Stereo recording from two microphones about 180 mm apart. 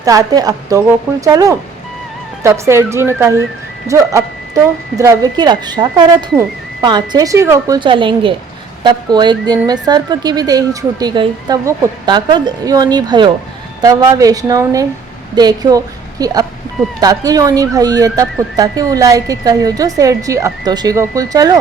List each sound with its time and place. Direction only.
0.0 s speech: 20° right (ahead or behind)
7.8 s a woman's voice: 25° right (ahead or behind)